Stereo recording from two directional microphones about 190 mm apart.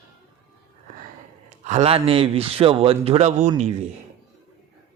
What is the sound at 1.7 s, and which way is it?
Speech, 35° right (ahead or behind).